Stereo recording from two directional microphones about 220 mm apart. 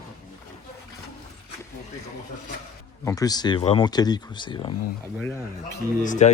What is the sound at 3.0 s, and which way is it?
Speech, 15° left (ahead or behind).